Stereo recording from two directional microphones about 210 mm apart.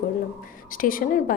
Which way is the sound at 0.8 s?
40° left (ahead or behind).